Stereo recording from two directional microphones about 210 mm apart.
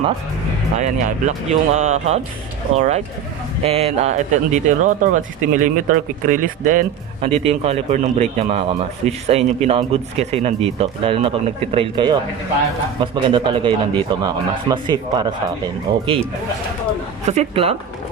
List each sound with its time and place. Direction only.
0.8 s speech: 35° right (ahead or behind)
17.2 s speech: 30° right (ahead or behind)